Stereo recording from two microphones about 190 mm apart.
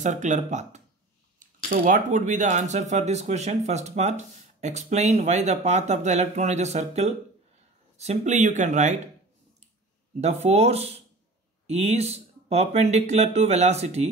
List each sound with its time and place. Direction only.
0.0 s speech: 40° right (ahead or behind)
10.2 s speech: 35° right (ahead or behind)